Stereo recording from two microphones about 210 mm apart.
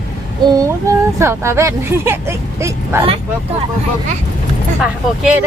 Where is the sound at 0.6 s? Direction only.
15° right (ahead or behind).